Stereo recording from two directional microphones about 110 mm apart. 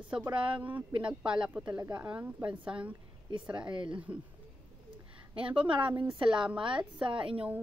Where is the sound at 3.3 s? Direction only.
45° right (ahead or behind).